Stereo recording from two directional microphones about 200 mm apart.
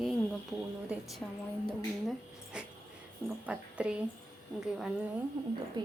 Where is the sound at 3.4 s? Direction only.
5° right (ahead or behind).